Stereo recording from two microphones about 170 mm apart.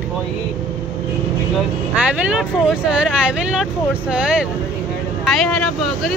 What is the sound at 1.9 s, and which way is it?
Speech, 5° right (ahead or behind).